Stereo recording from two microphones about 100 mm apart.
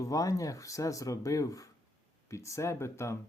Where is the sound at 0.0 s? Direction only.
35° left (ahead or behind).